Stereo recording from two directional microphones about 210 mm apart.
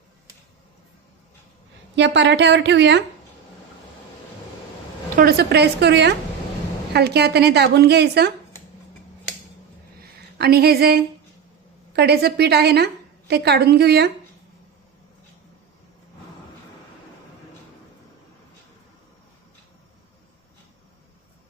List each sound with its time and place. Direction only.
2.0 s a woman's voice: 55° right (ahead or behind)
5.1 s a woman's voice: 45° right (ahead or behind)
10.3 s a woman's voice: 50° right (ahead or behind)